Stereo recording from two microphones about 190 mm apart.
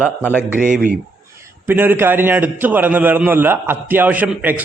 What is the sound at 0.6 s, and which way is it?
Speech, 45° right (ahead or behind).